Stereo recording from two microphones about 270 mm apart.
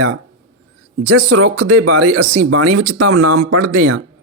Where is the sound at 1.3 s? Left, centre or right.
Right.